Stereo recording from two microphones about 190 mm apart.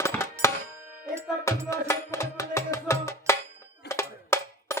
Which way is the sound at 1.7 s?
15° left (ahead or behind).